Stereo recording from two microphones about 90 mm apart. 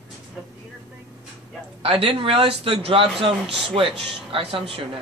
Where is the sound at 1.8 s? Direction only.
90° right.